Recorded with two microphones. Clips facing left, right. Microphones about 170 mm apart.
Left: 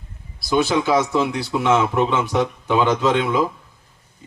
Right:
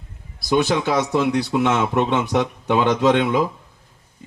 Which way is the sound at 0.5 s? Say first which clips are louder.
Left 1 dB; 65° right (ahead or behind).